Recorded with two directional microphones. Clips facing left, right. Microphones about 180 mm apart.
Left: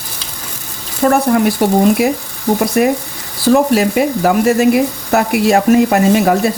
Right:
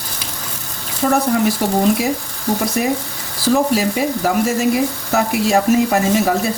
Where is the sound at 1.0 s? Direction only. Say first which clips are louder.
Left 4 dB; 70° left (ahead or behind).